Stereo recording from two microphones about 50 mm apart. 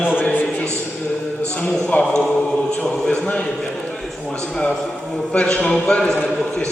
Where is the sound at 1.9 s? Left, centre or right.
Left.